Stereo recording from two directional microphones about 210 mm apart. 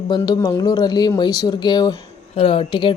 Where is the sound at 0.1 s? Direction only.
20° left (ahead or behind).